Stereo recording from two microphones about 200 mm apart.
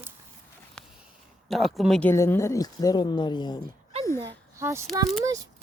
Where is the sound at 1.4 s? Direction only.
Centre (ahead or behind); by 3.6 s 20° left (ahead or behind).